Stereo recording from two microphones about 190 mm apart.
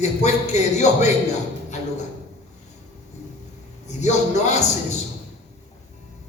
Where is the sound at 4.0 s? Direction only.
40° left (ahead or behind).